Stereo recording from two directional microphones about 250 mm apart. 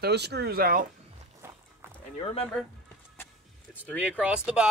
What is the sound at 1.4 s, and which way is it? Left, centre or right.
Walk, centre.